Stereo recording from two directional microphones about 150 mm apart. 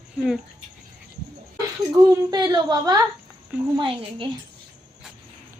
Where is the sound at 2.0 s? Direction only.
25° right (ahead or behind).